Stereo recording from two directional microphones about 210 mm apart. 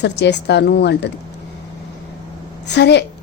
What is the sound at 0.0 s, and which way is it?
Speech, 55° left (ahead or behind).